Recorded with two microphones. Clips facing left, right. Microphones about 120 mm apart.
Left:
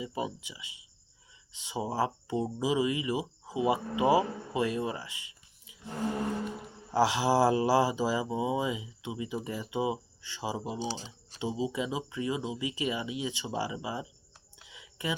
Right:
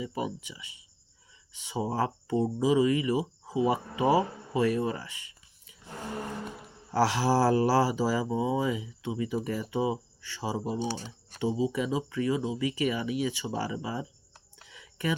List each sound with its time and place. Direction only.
0.0 s speech: 20° left (ahead or behind)
4.9 s a sound: 15° left (ahead or behind)
6.9 s speech: 15° left (ahead or behind)
10.7 s speech: 55° right (ahead or behind)
11.3 s speech: 20° left (ahead or behind)
14.7 s a sound: 15° left (ahead or behind)